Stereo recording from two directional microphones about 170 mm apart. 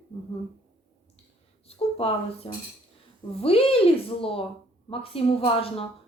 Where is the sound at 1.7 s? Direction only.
35° left (ahead or behind).